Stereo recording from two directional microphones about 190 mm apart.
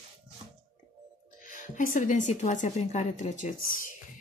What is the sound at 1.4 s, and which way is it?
Speech, 45° left (ahead or behind).